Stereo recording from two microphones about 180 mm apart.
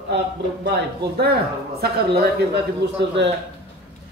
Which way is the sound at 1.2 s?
60° right (ahead or behind).